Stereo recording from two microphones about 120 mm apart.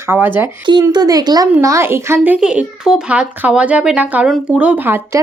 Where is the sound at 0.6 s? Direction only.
40° right (ahead or behind).